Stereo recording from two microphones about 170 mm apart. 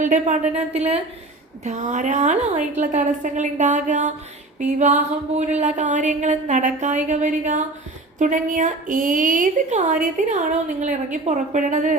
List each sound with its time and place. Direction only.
0.0 s a woman's voice: 45° right (ahead or behind)